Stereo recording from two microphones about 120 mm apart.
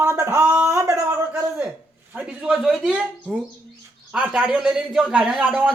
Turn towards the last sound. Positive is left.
turn(degrees=-10)  # may be behind; listen again after turning